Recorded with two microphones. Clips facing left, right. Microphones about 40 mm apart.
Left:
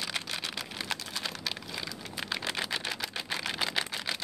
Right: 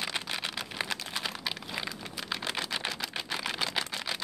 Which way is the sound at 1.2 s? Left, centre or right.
Centre.